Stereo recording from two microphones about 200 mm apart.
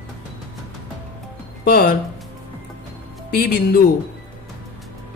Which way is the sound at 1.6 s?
50° left (ahead or behind).